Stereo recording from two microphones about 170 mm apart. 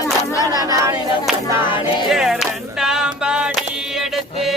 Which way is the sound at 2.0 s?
Centre (ahead or behind).